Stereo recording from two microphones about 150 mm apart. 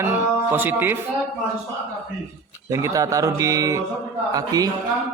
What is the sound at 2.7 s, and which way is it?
Speech, 20° right (ahead or behind).